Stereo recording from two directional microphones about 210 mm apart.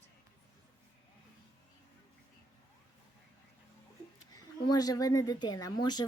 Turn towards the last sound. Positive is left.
turn(degrees=20)  # may be behind; listen again after turning